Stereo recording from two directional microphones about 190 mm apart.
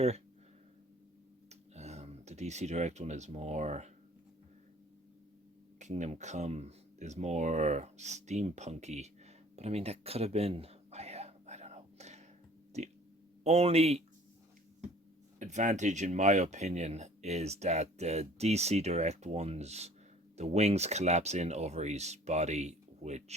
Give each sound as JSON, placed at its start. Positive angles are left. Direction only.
{"t": 1.5, "sound": "speech", "side_deg": -35}
{"t": 5.8, "sound": "speech", "side_deg": -35}
{"t": 9.6, "sound": "a sound", "side_deg": -35}
{"t": 13.4, "sound": "speech", "side_deg": -35}
{"t": 15.4, "sound": "speech", "side_deg": -40}